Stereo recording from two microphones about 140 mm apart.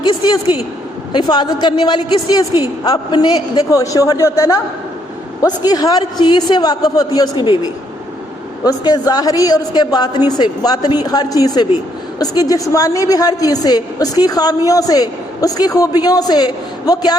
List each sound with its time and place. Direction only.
0.0 s a woman's voice: 30° left (ahead or behind)
8.6 s a woman's voice: 30° left (ahead or behind)